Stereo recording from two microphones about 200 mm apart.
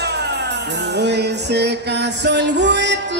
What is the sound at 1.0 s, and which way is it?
Music, 55° right (ahead or behind).